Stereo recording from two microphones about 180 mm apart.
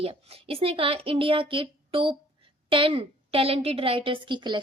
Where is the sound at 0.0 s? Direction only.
35° right (ahead or behind).